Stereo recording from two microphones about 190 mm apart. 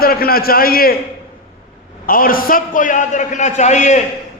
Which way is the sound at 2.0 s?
50° left (ahead or behind).